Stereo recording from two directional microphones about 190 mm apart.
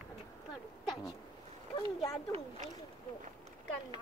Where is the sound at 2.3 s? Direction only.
35° right (ahead or behind).